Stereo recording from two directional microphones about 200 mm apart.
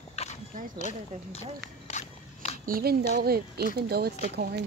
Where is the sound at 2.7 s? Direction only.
45° right (ahead or behind).